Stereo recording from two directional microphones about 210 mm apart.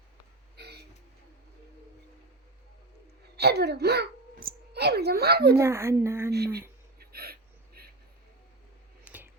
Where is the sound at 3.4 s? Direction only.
50° right (ahead or behind).